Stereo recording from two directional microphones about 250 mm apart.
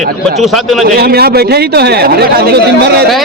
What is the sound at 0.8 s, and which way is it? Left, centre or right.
Speech, right.